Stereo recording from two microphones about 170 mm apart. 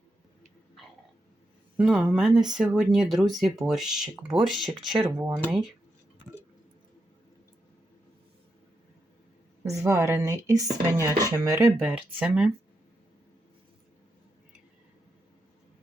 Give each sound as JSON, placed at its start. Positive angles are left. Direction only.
{"t": 1.7, "sound": "speech", "side_deg": -5}
{"t": 5.2, "sound": "speech", "side_deg": -15}
{"t": 9.6, "sound": "speech", "side_deg": -15}